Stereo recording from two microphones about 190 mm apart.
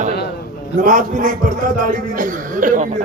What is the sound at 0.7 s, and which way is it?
A man's voice, 45° right (ahead or behind).